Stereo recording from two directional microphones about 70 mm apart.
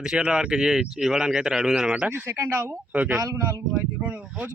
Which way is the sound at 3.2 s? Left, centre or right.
Right.